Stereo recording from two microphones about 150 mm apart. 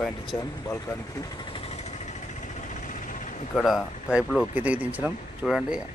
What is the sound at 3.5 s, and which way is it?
A man's voice, centre (ahead or behind).